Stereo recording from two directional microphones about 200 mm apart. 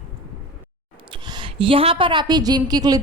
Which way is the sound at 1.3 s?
25° right (ahead or behind).